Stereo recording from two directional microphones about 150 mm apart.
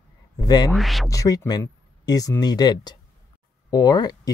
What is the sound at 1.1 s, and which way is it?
Speech, 20° left (ahead or behind).